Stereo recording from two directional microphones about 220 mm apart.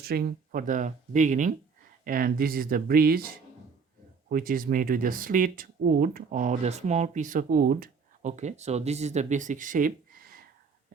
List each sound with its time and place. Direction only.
0.0 s speech: 45° right (ahead or behind)
4.3 s speech: 40° right (ahead or behind)